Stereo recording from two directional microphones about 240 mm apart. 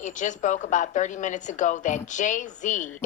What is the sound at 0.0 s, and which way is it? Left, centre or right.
A woman's voice, left.